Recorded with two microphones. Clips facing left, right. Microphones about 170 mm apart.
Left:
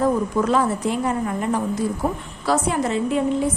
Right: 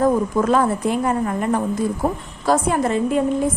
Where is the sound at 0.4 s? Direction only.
50° right (ahead or behind).